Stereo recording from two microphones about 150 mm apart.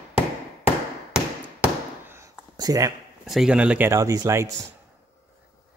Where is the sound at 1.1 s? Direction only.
10° right (ahead or behind).